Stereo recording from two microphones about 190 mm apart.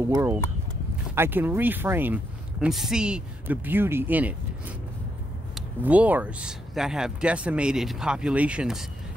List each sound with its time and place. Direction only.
0.1 s speech: 10° right (ahead or behind)